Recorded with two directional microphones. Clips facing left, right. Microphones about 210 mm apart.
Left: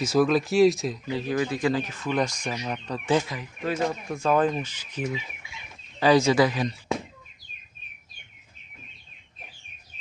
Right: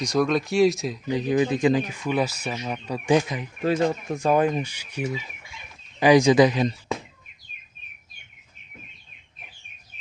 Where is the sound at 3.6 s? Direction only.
35° right (ahead or behind).